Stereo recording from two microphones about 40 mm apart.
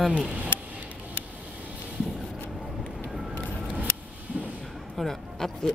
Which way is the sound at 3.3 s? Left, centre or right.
Right.